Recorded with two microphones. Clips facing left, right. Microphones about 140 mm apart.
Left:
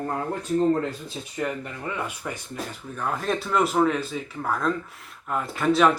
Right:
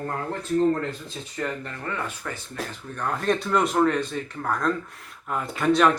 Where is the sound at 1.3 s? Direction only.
10° left (ahead or behind).